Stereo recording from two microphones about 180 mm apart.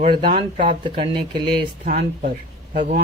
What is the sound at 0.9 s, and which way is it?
Speech, 25° right (ahead or behind).